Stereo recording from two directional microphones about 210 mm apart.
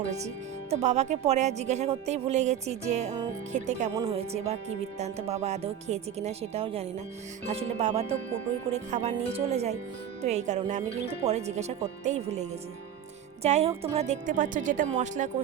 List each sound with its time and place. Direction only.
0.7 s speech: 30° right (ahead or behind)
3.9 s speech: 15° right (ahead or behind)
4.2 s speech: 30° right (ahead or behind)